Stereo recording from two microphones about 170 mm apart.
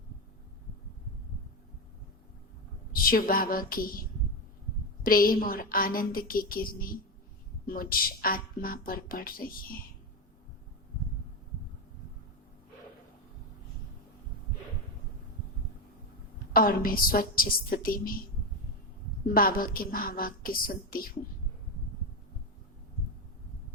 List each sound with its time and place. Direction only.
2.9 s a woman's voice: 60° left (ahead or behind)
5.0 s a woman's voice: 55° left (ahead or behind)
16.5 s a woman's voice: 60° left (ahead or behind)
19.3 s a woman's voice: 60° left (ahead or behind)